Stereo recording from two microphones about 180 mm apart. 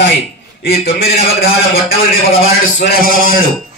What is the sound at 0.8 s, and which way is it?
A man's voice, 60° left (ahead or behind).